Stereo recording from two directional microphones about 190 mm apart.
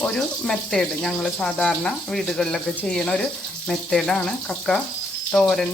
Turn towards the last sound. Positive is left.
turn(degrees=0)  # may be behind; listen again after turning